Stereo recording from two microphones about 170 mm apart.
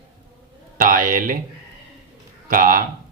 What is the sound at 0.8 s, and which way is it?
Speech, 55° right (ahead or behind).